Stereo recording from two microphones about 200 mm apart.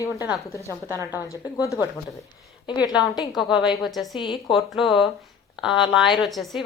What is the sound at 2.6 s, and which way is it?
Speech, 20° left (ahead or behind).